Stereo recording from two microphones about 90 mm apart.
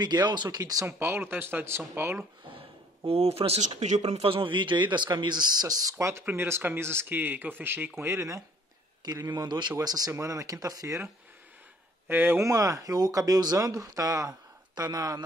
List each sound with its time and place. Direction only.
0.0 s speech: 55° right (ahead or behind)
0.8 s speech: 25° right (ahead or behind)
3.0 s speech: 90° right; by 8.4 s 35° right (ahead or behind)
9.0 s speech: 50° right (ahead or behind)
9.8 s speech: 45° right (ahead or behind)
12.1 s speech: 25° right (ahead or behind)
12.4 s speech: 40° right (ahead or behind)